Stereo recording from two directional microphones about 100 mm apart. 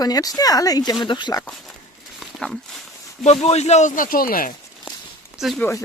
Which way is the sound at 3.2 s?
90° left.